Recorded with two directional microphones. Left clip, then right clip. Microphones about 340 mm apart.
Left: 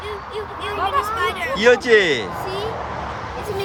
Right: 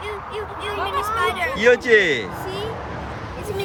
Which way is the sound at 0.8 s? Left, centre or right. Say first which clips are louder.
Left 2 dB; centre.